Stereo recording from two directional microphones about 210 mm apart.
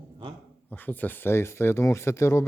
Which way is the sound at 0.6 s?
10° left (ahead or behind).